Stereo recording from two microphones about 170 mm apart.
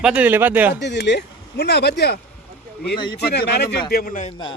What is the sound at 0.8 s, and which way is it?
Speech, 90° left.